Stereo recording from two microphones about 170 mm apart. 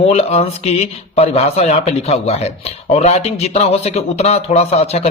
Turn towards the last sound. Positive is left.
turn(degrees=35)  # may be behind; listen again after turning